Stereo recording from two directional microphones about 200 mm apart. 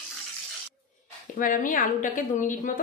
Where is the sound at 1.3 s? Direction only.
40° left (ahead or behind).